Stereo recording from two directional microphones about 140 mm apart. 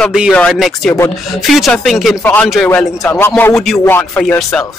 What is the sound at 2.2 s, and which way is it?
Speech, 15° left (ahead or behind).